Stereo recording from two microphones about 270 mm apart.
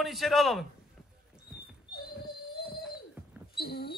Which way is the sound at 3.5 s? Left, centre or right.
Left.